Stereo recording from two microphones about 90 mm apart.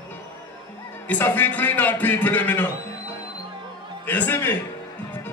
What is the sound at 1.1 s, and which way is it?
A man's voice, 20° left (ahead or behind).